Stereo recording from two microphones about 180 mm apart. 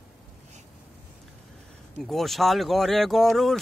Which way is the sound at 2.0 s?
Centre (ahead or behind).